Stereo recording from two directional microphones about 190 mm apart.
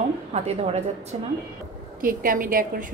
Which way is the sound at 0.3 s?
35° right (ahead or behind).